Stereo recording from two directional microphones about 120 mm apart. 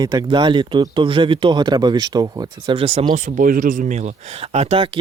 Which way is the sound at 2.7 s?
55° right (ahead or behind).